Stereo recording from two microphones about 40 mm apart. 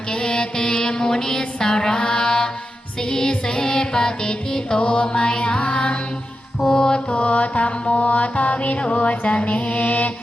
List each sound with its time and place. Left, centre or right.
0.1 s music: left
7.1 s music: left